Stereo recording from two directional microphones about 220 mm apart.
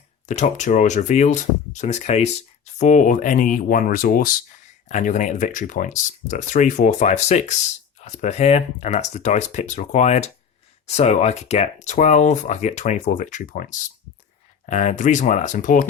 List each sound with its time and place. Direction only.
0.3 s speech: 35° left (ahead or behind)